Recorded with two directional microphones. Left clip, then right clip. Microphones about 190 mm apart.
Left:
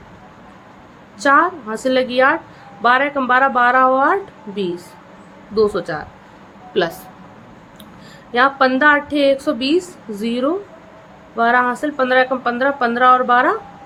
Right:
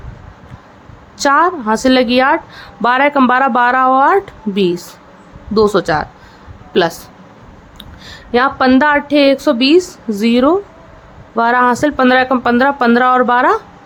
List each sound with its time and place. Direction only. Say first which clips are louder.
1.2 s a woman's voice: right 3 dB; 40° right (ahead or behind)
8.0 s a woman's voice: right 2 dB; 35° right (ahead or behind)